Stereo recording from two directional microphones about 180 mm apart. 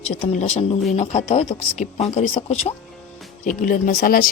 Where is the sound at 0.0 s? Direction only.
40° left (ahead or behind).